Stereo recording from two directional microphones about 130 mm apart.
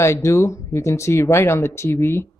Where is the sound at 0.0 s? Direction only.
20° left (ahead or behind).